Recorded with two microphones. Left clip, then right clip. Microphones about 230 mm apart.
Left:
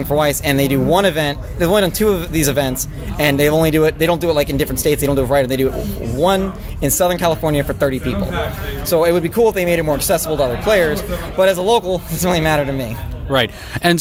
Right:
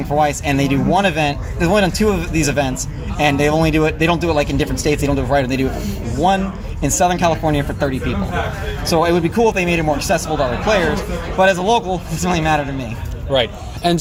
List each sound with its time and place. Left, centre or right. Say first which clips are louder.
0.2 s a man's voice: even; left
6.8 s a man's voice: even; left